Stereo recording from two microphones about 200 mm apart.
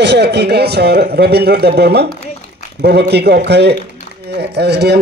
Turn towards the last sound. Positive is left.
turn(degrees=-55)  # may be behind; listen again after turning